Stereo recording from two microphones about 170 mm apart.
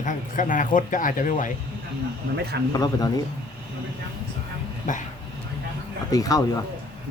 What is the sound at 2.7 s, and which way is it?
Speech, 20° left (ahead or behind).